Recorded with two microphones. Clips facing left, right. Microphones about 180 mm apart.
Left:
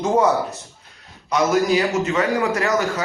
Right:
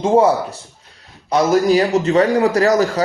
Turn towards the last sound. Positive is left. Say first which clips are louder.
# right 6 dB
turn(degrees=-35)  # may be behind; listen again after turning